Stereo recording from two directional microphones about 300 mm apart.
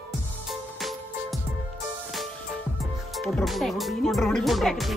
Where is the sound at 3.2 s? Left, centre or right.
Centre.